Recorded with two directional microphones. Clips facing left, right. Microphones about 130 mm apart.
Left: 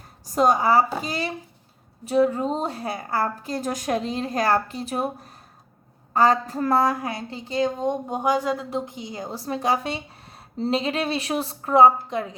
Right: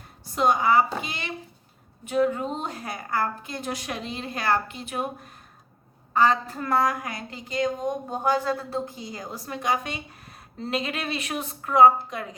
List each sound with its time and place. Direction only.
0.3 s a woman's voice: 40° left (ahead or behind)
8.1 s a woman's voice: 15° left (ahead or behind)